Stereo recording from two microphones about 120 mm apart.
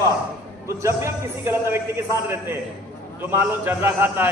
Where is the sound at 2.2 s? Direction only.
20° right (ahead or behind).